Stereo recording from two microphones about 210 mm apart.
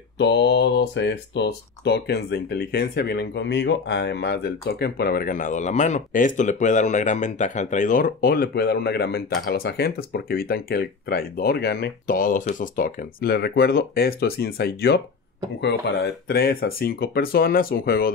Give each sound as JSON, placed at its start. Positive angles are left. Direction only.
{"t": 0.2, "sound": "speech", "side_deg": 55}